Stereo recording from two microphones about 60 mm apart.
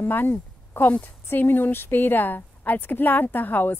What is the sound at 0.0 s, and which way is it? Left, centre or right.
Speech, left.